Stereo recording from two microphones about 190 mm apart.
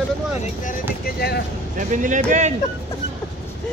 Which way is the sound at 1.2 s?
55° left (ahead or behind).